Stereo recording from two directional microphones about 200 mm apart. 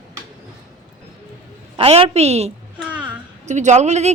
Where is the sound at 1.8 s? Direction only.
25° right (ahead or behind).